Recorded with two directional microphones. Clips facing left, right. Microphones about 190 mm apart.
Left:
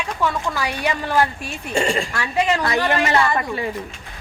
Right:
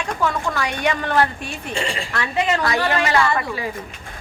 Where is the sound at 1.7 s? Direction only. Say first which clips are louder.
Left 6 dB; 45° left (ahead or behind).